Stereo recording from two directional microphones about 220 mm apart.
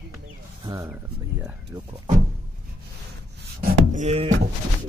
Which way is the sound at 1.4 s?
10° right (ahead or behind).